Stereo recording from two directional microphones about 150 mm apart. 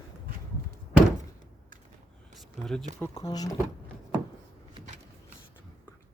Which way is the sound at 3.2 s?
25° left (ahead or behind).